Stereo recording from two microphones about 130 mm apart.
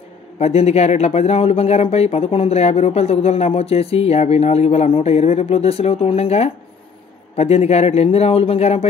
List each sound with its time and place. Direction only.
0.4 s speech: 55° left (ahead or behind)